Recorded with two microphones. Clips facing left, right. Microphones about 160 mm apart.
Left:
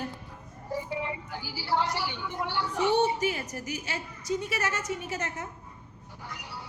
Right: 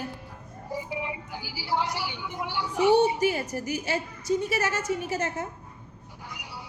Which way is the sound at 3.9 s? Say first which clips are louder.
Right 5 dB; 10° right (ahead or behind).